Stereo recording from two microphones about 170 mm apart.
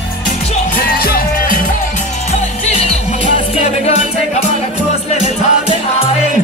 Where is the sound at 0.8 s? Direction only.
60° left (ahead or behind).